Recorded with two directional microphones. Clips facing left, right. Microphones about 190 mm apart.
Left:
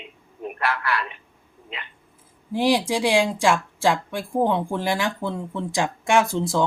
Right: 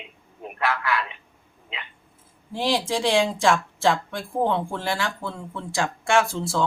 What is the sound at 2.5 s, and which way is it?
Speech, 15° left (ahead or behind).